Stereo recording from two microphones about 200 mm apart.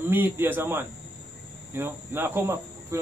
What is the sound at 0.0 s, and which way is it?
Cricket, 10° right (ahead or behind).